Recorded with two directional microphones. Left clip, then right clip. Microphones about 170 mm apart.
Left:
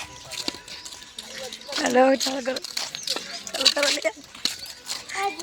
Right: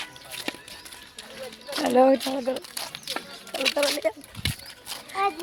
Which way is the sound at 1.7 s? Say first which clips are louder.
Even; centre (ahead or behind).